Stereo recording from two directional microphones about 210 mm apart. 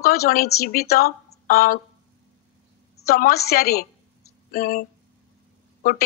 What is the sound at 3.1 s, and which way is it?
A woman's voice, 45° left (ahead or behind).